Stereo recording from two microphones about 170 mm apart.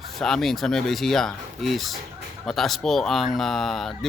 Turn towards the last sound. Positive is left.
turn(degrees=0)  # may be behind; listen again after turning